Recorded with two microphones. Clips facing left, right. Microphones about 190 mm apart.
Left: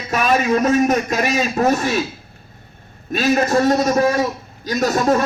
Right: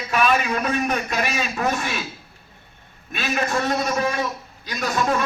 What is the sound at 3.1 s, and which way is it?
A man's voice, 40° left (ahead or behind).